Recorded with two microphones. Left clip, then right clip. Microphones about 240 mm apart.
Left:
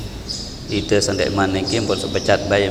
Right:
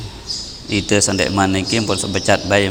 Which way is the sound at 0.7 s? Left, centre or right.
Right.